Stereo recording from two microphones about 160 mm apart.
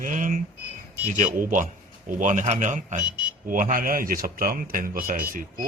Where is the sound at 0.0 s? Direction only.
55° right (ahead or behind).